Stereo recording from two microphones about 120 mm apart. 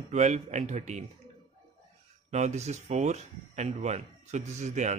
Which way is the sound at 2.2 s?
70° right (ahead or behind).